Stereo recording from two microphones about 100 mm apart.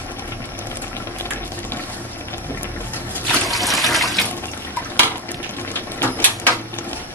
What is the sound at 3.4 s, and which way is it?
Water, centre (ahead or behind).